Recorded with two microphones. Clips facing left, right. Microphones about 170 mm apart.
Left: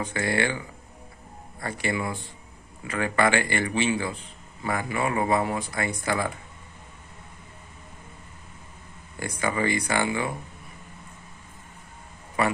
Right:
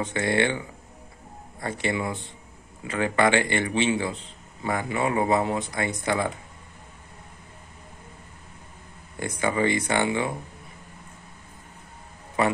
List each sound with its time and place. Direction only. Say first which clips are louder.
0.0 s a man's voice: right 2 dB; 25° right (ahead or behind)
1.6 s a man's voice: right 1 dB; 25° right (ahead or behind)
9.2 s a man's voice: right 2 dB; 25° right (ahead or behind)
12.4 s a man's voice: right 2 dB; 25° right (ahead or behind)